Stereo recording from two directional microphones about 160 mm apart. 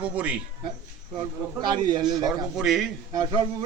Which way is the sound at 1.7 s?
25° right (ahead or behind).